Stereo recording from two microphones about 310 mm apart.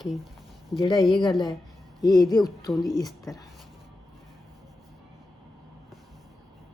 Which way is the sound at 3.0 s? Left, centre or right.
Centre.